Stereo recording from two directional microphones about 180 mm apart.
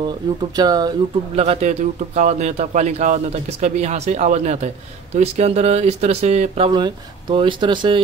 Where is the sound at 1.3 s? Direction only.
35° right (ahead or behind).